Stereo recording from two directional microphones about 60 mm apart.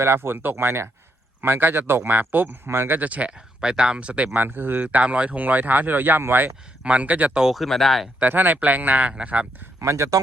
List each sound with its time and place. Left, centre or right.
0.0 s speech: right
3.0 s speech: right
3.3 s speech: centre
4.4 s speech: right
6.8 s speech: right
7.3 s speech: centre
7.6 s speech: centre
8.2 s speech: right
9.8 s speech: right